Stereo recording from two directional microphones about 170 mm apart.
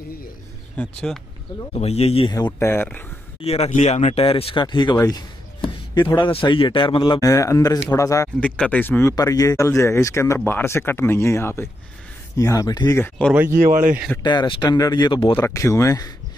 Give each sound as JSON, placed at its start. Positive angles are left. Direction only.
{"t": 0.7, "sound": "speech", "side_deg": 5}
{"t": 1.7, "sound": "speech", "side_deg": 35}
{"t": 2.3, "sound": "speech", "side_deg": 20}
{"t": 3.3, "sound": "speech", "side_deg": 35}
{"t": 8.4, "sound": "speech", "side_deg": 5}
{"t": 13.3, "sound": "speech", "side_deg": -10}
{"t": 13.7, "sound": "speech", "side_deg": -50}
{"t": 14.2, "sound": "speech", "side_deg": 25}
{"t": 15.3, "sound": "speech", "side_deg": 15}